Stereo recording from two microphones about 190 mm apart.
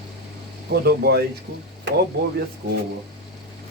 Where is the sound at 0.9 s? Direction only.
55° right (ahead or behind).